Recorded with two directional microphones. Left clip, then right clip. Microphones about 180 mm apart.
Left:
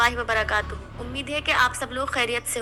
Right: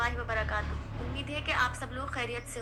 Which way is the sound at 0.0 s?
55° left (ahead or behind).